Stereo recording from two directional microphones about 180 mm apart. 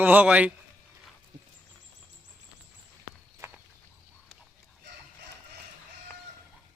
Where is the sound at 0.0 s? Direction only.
10° right (ahead or behind).